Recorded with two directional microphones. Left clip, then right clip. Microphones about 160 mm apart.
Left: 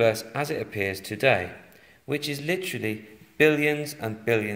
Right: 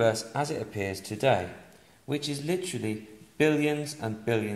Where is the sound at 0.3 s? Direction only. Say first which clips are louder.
Left 2 dB; 10° left (ahead or behind).